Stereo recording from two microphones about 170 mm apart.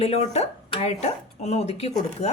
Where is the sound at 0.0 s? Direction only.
40° left (ahead or behind).